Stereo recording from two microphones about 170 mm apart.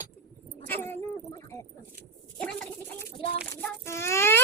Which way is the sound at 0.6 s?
10° left (ahead or behind).